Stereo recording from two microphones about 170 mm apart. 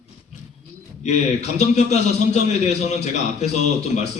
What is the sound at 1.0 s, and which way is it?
A man's voice, 40° left (ahead or behind).